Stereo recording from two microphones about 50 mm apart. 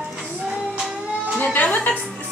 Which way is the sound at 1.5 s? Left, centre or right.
Left.